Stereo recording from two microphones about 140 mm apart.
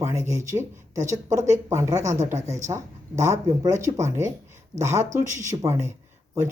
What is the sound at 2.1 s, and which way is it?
Speech, 55° right (ahead or behind).